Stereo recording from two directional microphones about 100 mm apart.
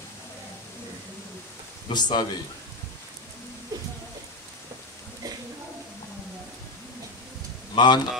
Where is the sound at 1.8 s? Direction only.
45° left (ahead or behind).